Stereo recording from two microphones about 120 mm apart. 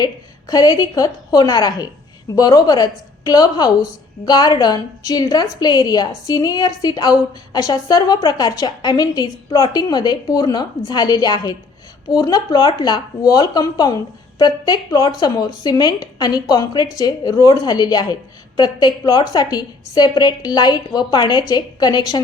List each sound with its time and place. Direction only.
0.0 s a woman's voice: 30° left (ahead or behind)